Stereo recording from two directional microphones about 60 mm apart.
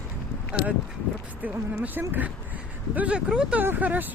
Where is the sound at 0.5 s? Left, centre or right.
Centre.